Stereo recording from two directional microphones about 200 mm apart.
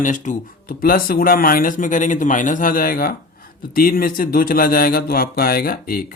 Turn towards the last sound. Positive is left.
turn(degrees=45)  # may be behind; listen again after turning